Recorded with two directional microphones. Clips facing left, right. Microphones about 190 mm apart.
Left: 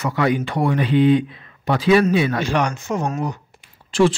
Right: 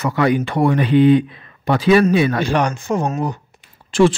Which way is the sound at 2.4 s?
35° right (ahead or behind).